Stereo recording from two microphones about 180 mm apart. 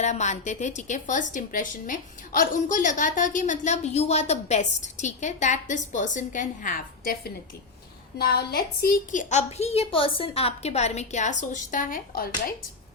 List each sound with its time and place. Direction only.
0.0 s a woman's voice: 40° left (ahead or behind)
8.2 s a woman's voice: 60° left (ahead or behind)